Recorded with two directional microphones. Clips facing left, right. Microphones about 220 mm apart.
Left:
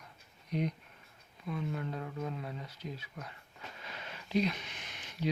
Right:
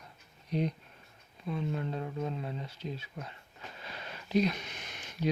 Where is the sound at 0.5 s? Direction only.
30° right (ahead or behind).